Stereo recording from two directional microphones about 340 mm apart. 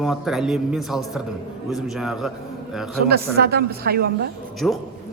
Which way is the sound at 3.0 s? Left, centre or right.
Right.